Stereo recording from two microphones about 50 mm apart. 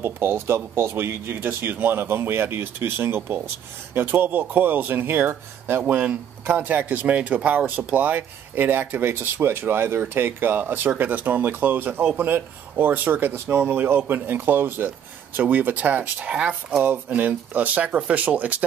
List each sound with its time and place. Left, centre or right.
0.0 s speech: right
12.2 s speech: right